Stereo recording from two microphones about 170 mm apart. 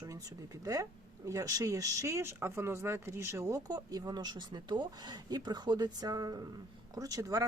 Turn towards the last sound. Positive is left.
turn(degrees=-20)  # may be behind; listen again after turning